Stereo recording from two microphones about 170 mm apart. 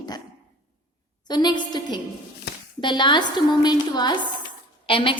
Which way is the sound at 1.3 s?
25° left (ahead or behind).